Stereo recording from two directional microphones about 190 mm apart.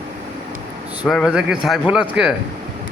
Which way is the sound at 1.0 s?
Centre (ahead or behind).